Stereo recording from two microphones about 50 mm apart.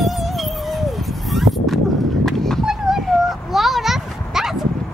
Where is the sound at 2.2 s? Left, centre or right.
Centre.